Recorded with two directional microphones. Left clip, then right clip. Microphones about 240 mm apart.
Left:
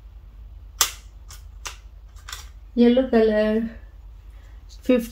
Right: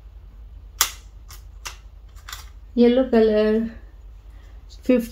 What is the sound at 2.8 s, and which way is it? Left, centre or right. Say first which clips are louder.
Speech: right 1 dB; right.